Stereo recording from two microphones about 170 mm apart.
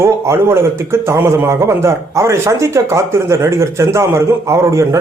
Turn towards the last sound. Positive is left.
turn(degrees=-15)  # may be behind; listen again after turning